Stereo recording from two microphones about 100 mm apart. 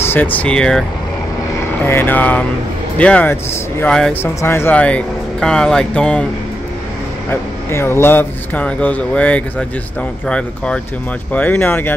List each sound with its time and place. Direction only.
0.0 s speech: 20° left (ahead or behind)
1.9 s speech: 20° left (ahead or behind)
4.1 s speech: 25° left (ahead or behind)
4.7 s speech: 15° left (ahead or behind)
7.2 s speech: 25° left (ahead or behind)